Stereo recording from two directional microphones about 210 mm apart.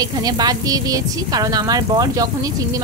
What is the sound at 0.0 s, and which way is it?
A woman's voice, 20° right (ahead or behind).